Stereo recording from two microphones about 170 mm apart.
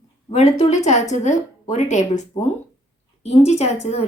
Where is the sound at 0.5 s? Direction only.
40° left (ahead or behind).